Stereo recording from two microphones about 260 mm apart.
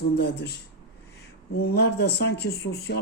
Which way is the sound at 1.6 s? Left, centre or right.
Left.